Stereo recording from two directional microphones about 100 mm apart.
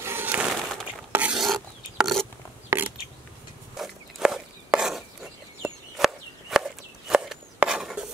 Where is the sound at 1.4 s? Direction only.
Centre (ahead or behind).